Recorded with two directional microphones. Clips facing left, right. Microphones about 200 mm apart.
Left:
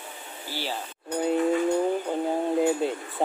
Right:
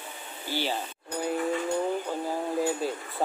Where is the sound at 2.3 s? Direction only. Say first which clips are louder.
Left 5 dB; 20° left (ahead or behind).